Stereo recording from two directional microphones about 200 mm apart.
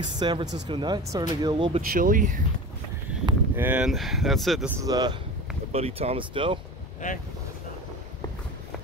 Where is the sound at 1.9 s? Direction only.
45° right (ahead or behind).